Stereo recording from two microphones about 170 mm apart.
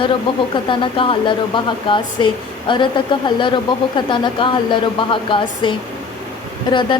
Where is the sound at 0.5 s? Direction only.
30° left (ahead or behind).